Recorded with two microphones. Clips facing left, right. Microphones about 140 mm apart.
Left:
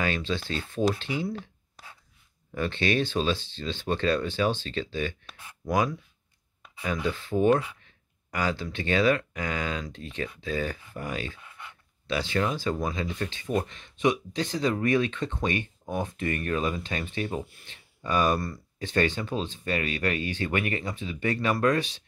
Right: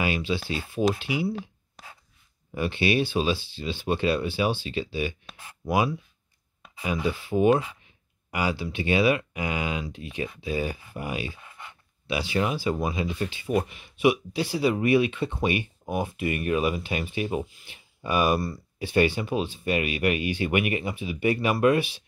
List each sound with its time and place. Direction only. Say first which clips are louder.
0.0 s speech: right 2 dB; 10° right (ahead or behind)
11.4 s a sound: right 1 dB; 25° right (ahead or behind)
12.1 s speech: right 1 dB; 10° right (ahead or behind)